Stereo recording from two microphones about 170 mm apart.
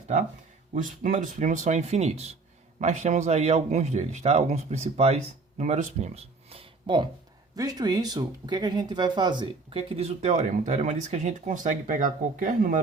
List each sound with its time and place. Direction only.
0.7 s speech: 50° right (ahead or behind)